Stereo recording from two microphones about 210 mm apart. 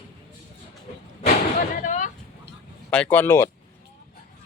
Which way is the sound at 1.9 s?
35° left (ahead or behind).